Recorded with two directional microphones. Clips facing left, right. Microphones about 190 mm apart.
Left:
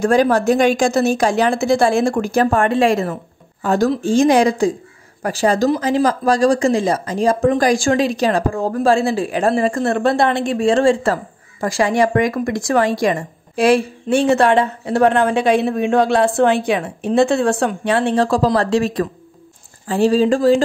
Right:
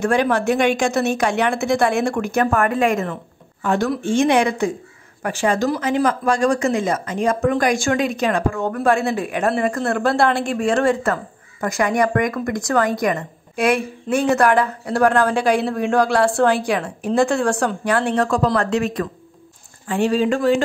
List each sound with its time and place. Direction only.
0.0 s speech: 35° left (ahead or behind)